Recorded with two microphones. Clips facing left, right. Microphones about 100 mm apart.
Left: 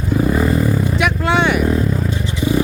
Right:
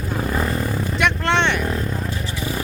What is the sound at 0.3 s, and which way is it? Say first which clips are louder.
Vehicle: left 6 dB; 5° left (ahead or behind).